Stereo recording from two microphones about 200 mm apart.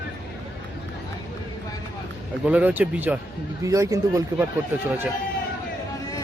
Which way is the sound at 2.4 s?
10° right (ahead or behind).